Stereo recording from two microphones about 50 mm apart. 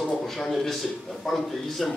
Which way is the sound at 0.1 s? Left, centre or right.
Centre.